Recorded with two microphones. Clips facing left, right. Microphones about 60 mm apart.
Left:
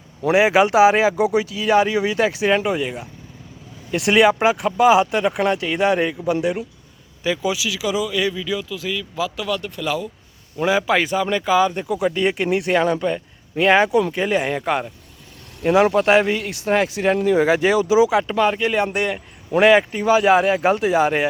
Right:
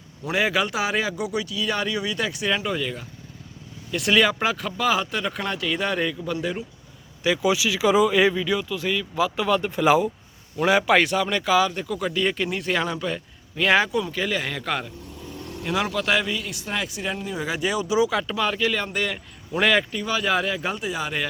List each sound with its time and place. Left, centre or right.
0.3 s speech: centre
7.5 s speech: centre
10.6 s speech: centre
12.4 s speech: left
13.0 s a man's voice: centre
14.1 s speech: left
16.2 s a man's voice: left
18.9 s speech: centre
19.9 s speech: left